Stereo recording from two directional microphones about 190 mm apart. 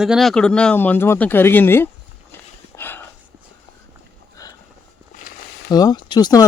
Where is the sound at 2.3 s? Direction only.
10° left (ahead or behind).